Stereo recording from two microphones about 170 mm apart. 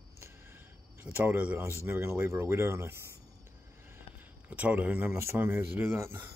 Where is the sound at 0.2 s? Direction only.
15° right (ahead or behind).